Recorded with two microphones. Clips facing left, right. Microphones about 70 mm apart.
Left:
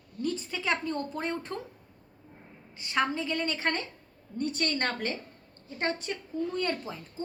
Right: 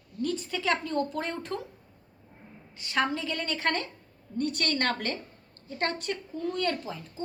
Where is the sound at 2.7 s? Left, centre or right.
Left.